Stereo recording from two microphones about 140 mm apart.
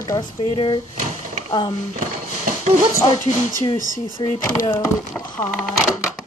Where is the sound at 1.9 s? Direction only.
75° right (ahead or behind).